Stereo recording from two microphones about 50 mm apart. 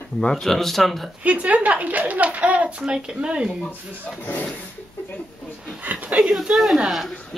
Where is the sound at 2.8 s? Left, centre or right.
Centre.